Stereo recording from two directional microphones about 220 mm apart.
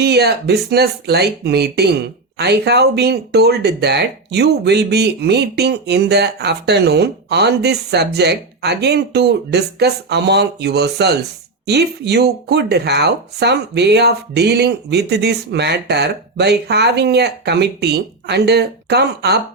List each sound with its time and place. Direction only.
0.0 s speech: 45° right (ahead or behind)